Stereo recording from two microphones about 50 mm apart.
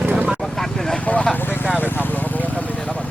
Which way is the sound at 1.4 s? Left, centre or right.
Left.